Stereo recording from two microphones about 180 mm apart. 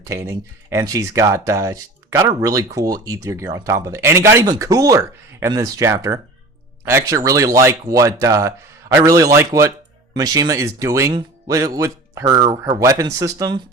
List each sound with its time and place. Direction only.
0.0 s speech: 15° right (ahead or behind)